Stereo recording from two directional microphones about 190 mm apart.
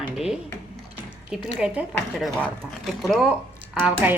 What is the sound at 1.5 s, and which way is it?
Speech, 5° right (ahead or behind).